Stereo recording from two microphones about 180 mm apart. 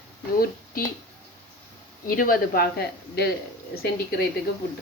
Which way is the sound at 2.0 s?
50° left (ahead or behind).